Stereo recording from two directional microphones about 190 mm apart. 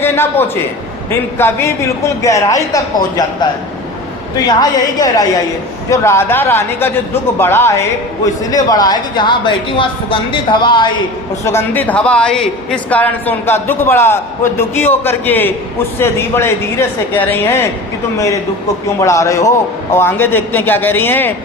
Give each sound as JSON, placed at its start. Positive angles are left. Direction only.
{"t": 0.0, "sound": "a man's voice", "side_deg": 10}
{"t": 4.4, "sound": "a woman's voice", "side_deg": 20}
{"t": 11.4, "sound": "a man's voice", "side_deg": 10}
{"t": 18.9, "sound": "a man's voice", "side_deg": 15}